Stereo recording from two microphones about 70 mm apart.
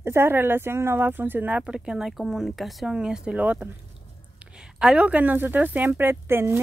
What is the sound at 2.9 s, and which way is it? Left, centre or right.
Speech, centre.